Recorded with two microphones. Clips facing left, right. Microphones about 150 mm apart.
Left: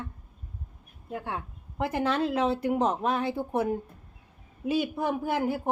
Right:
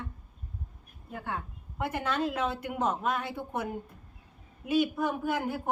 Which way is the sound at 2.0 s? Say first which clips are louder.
Left 5 dB; 30° left (ahead or behind).